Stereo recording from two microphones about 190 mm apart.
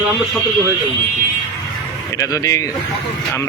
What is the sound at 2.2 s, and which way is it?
Speech, 15° left (ahead or behind).